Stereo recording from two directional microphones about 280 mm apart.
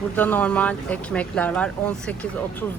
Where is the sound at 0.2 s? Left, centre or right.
Centre.